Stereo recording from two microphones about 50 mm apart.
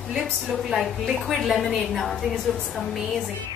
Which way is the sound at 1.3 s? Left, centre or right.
Centre.